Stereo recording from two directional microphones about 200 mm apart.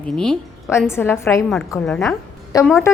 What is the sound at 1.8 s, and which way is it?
Speech, 5° left (ahead or behind).